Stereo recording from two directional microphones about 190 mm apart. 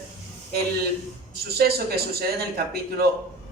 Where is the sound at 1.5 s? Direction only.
55° right (ahead or behind).